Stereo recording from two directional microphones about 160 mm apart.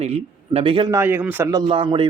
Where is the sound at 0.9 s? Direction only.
15° right (ahead or behind).